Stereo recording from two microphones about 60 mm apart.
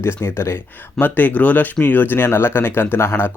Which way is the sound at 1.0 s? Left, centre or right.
Left.